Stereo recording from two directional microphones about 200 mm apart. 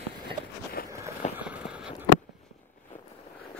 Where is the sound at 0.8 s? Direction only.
50° left (ahead or behind).